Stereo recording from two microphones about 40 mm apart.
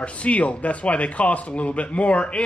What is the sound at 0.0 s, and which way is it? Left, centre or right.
A man's voice, left.